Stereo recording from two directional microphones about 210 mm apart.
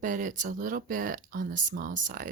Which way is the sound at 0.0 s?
40° right (ahead or behind).